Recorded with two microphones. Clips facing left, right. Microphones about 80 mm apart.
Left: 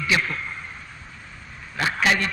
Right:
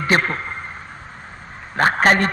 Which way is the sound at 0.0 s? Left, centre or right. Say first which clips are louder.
Right 5 dB; right.